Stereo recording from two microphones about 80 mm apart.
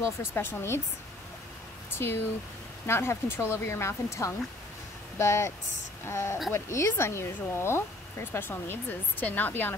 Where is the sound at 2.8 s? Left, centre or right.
Left.